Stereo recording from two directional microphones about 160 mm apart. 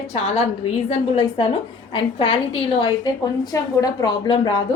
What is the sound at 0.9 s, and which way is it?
Speech, 45° left (ahead or behind).